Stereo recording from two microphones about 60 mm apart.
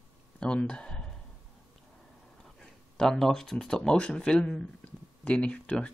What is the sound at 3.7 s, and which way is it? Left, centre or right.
Speech, centre.